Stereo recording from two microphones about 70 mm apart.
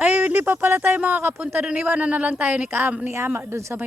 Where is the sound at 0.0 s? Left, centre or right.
Right.